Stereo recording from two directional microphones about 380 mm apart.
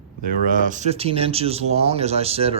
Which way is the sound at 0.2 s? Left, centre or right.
Centre.